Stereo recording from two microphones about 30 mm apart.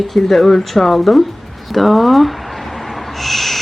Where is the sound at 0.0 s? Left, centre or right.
Centre.